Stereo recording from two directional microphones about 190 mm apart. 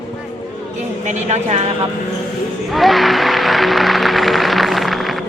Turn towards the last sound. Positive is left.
turn(degrees=0)  # may be behind; listen again after turning